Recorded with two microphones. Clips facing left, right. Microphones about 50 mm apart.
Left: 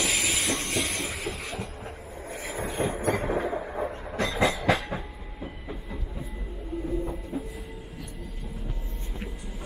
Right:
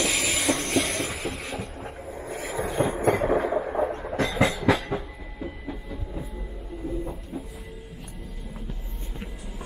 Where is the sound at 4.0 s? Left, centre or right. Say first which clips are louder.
Right 3 dB; centre.